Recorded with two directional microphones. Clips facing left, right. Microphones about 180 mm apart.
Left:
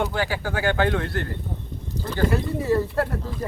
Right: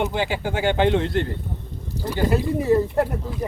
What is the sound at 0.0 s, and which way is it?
Speech, 20° right (ahead or behind).